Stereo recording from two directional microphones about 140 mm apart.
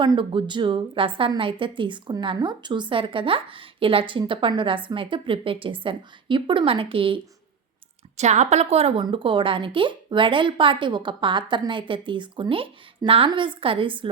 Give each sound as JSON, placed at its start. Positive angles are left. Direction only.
{"t": 0.0, "sound": "a woman's voice", "side_deg": -35}
{"t": 8.1, "sound": "a woman's voice", "side_deg": -55}
{"t": 9.0, "sound": "a woman's voice", "side_deg": -35}